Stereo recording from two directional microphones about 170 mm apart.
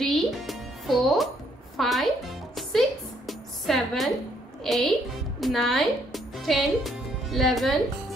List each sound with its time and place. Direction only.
0.0 s music: centre (ahead or behind)